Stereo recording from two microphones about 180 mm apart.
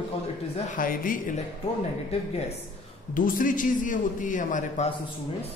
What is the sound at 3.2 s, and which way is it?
A man's voice, 50° left (ahead or behind).